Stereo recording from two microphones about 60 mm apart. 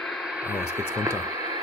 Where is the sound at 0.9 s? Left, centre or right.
Right.